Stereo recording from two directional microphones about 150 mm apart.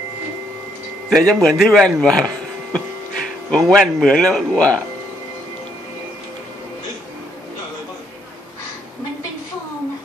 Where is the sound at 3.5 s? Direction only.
Centre (ahead or behind).